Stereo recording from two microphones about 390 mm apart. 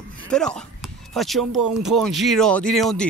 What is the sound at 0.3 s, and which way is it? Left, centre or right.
Speech, centre.